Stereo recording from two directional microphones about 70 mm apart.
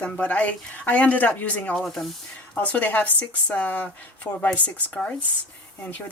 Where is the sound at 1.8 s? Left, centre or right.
Centre.